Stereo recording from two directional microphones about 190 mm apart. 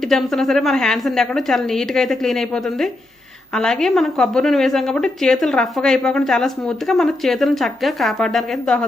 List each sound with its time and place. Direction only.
0.1 s a woman's voice: centre (ahead or behind)